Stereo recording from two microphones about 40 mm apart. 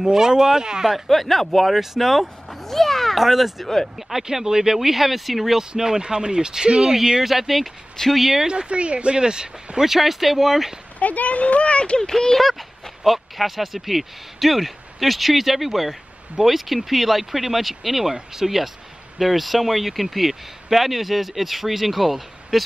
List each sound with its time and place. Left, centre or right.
0.0 s speech: centre
0.9 s speech: centre
1.7 s a sound: centre
3.2 s speech: centre
5.6 s speech: centre
7.0 s speech: centre
8.5 s speech: right
9.8 s speech: centre
11.0 s speech: left
12.0 s speech: centre